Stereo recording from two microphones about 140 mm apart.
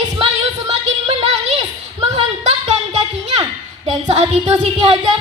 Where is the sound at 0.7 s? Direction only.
50° right (ahead or behind).